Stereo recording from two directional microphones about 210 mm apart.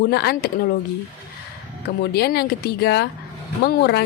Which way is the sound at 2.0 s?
50° left (ahead or behind).